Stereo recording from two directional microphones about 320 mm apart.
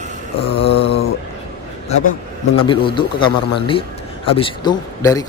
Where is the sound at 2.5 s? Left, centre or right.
Centre.